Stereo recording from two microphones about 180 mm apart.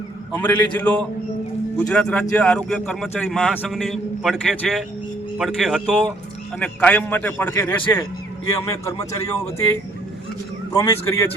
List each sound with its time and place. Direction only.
0.3 s a man's voice: 10° left (ahead or behind)